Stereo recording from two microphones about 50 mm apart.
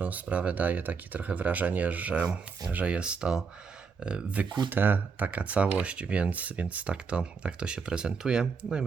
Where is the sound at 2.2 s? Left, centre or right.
Centre.